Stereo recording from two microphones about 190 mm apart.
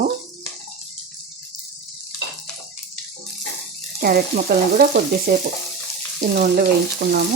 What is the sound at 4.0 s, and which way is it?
Frying, 50° right (ahead or behind).